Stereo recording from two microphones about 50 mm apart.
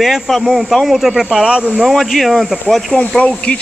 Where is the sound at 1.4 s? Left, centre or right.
Right.